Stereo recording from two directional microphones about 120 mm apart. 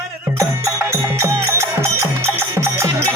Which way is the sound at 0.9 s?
25° right (ahead or behind).